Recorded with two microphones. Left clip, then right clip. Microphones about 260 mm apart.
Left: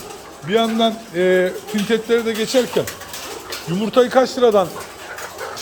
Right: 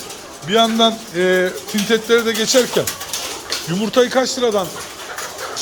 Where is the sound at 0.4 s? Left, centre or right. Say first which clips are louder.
Right 3 dB; centre.